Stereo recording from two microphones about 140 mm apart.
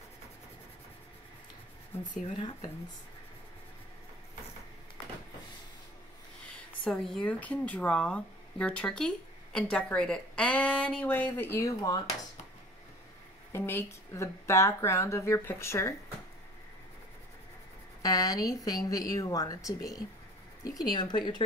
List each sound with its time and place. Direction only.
6.8 s speech: 5° left (ahead or behind); by 12.0 s 25° left (ahead or behind)
13.5 s speech: 15° left (ahead or behind)
18.0 s speech: 25° left (ahead or behind)